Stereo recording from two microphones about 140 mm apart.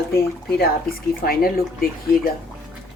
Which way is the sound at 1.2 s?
90° left.